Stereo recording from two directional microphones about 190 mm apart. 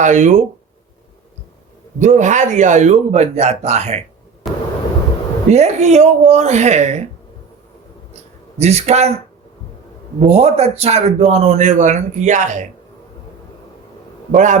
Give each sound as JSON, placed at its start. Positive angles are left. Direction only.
{"t": 0.0, "sound": "a man's voice", "side_deg": -40}
{"t": 2.0, "sound": "a man's voice", "side_deg": -40}
{"t": 4.4, "sound": "a sound", "side_deg": 0}
{"t": 5.5, "sound": "a man's voice", "side_deg": -35}
{"t": 8.5, "sound": "a man's voice", "side_deg": -35}
{"t": 10.2, "sound": "a man's voice", "side_deg": -35}
{"t": 14.3, "sound": "a man's voice", "side_deg": -40}